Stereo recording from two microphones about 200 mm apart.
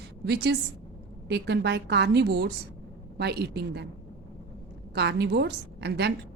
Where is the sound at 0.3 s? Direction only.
55° right (ahead or behind).